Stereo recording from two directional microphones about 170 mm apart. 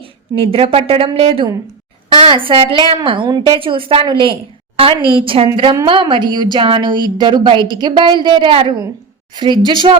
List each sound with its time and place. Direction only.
0.0 s a woman's voice: 35° right (ahead or behind)